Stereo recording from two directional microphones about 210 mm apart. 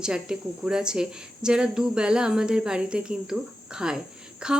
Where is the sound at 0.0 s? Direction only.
5° right (ahead or behind).